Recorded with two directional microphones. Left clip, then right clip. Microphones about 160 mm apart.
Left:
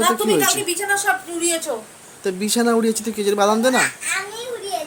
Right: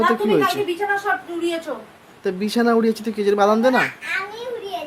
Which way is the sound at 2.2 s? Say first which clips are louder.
Even; 5° left (ahead or behind).